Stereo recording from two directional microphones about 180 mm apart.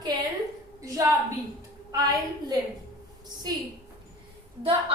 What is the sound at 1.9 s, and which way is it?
Speech, 20° right (ahead or behind).